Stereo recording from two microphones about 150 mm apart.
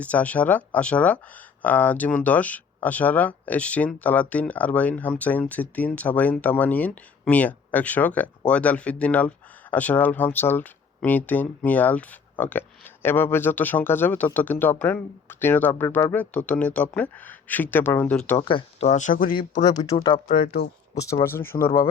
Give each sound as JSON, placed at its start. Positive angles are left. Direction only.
{"t": 0.0, "sound": "speech", "side_deg": 10}
{"t": 18.3, "sound": "speech", "side_deg": 35}
{"t": 18.9, "sound": "speech", "side_deg": 55}
{"t": 19.7, "sound": "speech", "side_deg": 25}
{"t": 20.2, "sound": "speech", "side_deg": 70}
{"t": 20.9, "sound": "speech", "side_deg": 20}